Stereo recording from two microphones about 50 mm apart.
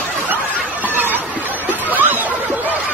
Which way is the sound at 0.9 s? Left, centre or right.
Right.